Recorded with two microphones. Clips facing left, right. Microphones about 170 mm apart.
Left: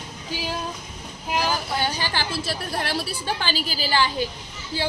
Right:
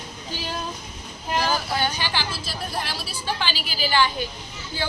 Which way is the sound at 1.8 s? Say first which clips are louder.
Even; 40° left (ahead or behind).